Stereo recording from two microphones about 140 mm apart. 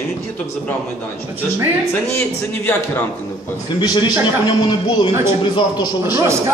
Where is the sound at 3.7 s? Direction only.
35° left (ahead or behind).